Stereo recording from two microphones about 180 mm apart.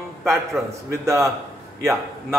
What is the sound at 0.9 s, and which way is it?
Speech, 15° right (ahead or behind).